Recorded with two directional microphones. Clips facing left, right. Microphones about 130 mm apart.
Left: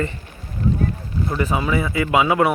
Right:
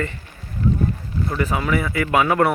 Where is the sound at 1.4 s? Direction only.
20° left (ahead or behind).